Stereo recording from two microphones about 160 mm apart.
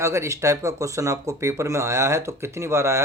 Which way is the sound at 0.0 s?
15° right (ahead or behind).